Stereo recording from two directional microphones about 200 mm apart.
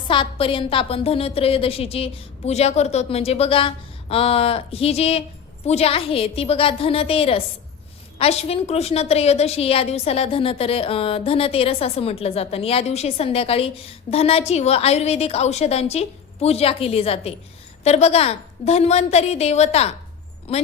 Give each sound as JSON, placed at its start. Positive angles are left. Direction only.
{"t": 0.1, "sound": "a woman's voice", "side_deg": 25}